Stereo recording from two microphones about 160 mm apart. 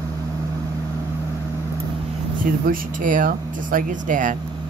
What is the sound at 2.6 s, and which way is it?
Speech, 60° right (ahead or behind).